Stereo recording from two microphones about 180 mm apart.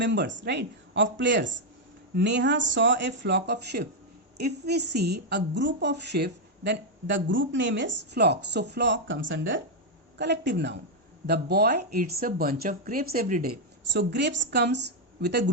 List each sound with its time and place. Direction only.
0.0 s speech: 75° right (ahead or behind)
2.1 s a woman's voice: 75° right (ahead or behind)
10.2 s a woman's voice: 70° right (ahead or behind)
11.3 s speech: 60° right (ahead or behind)